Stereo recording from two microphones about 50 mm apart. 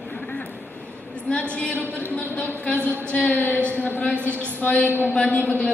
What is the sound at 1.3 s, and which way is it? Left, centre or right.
A woman's voice, left.